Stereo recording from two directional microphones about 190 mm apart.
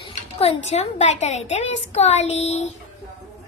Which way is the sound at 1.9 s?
35° left (ahead or behind).